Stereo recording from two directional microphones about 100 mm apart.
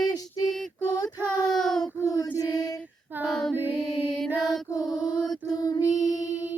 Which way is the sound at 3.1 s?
20° right (ahead or behind).